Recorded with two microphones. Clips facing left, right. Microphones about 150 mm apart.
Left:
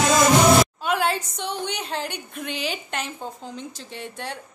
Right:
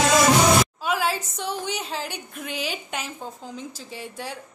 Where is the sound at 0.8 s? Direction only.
5° right (ahead or behind).